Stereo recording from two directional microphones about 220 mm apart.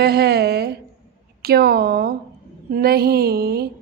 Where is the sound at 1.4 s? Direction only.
45° right (ahead or behind).